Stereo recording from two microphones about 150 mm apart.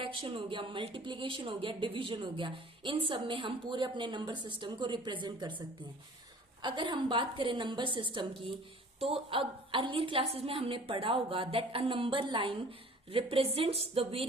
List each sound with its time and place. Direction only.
0.0 s speech: 35° right (ahead or behind)
6.6 s speech: 30° right (ahead or behind)